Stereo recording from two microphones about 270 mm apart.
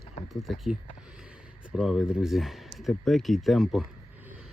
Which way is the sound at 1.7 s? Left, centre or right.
Centre.